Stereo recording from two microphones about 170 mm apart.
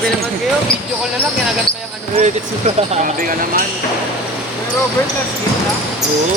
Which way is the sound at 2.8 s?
50° right (ahead or behind).